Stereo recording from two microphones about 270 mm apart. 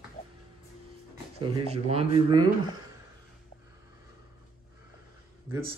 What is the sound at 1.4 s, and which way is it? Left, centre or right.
Speech, right.